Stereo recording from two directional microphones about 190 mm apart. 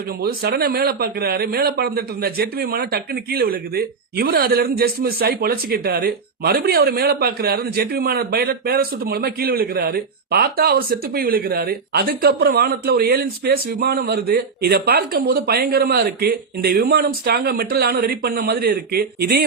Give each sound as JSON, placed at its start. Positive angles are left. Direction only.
{"t": 0.2, "sound": "a man's voice", "side_deg": -55}